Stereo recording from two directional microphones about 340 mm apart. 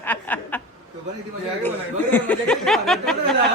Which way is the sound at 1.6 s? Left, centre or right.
Centre.